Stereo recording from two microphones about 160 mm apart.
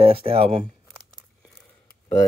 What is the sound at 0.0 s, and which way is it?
Speech, 35° right (ahead or behind).